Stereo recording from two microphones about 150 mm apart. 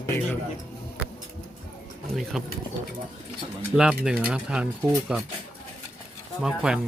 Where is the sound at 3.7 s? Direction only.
5° right (ahead or behind).